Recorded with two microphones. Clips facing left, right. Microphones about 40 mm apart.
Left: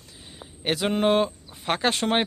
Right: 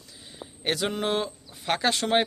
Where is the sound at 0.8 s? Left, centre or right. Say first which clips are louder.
Left 9 dB; left.